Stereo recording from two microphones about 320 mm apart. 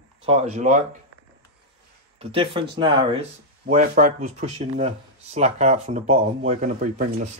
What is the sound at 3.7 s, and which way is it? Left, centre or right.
Speech, right.